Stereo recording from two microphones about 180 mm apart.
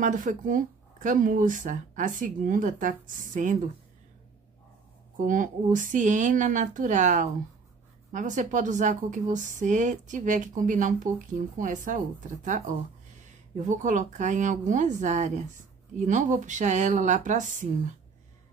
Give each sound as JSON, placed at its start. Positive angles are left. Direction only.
{"t": 0.0, "sound": "speech", "side_deg": -45}
{"t": 5.2, "sound": "speech", "side_deg": -45}